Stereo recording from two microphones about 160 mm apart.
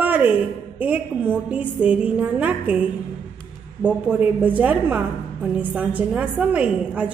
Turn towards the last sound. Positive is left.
turn(degrees=-10)  # may be behind; listen again after turning